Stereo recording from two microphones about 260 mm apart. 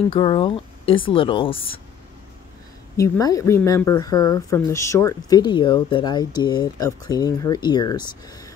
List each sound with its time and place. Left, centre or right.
0.1 s speech: centre
3.0 s speech: centre